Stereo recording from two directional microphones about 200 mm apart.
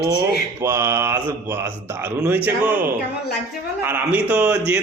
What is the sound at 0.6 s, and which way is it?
Speech, 15° right (ahead or behind).